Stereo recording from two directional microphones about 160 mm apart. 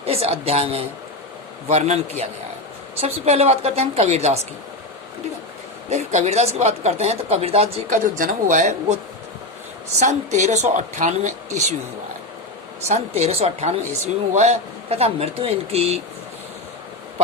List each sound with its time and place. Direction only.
0.0 s speech: 40° right (ahead or behind)
5.9 s speech: 45° right (ahead or behind)
8.2 s speech: 55° right (ahead or behind)
10.0 s speech: 45° right (ahead or behind)
12.9 s speech: 40° right (ahead or behind)